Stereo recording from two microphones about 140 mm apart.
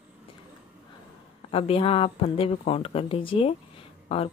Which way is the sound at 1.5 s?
40° left (ahead or behind).